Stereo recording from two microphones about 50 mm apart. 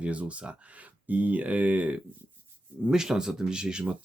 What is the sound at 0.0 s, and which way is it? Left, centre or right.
Speech, right.